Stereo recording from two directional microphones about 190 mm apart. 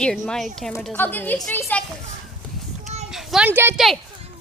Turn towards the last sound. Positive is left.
turn(degrees=-10)  # may be behind; listen again after turning